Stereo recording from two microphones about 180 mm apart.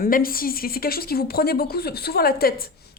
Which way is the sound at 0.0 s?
55° left (ahead or behind).